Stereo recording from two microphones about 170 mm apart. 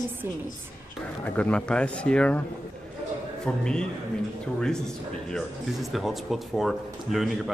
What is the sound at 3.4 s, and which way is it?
A man's voice, 5° left (ahead or behind).